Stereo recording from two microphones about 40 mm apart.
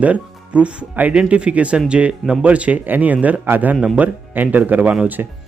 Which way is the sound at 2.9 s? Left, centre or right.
Right.